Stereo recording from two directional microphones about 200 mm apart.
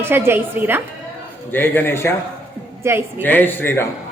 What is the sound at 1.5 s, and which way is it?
Speech, 10° left (ahead or behind).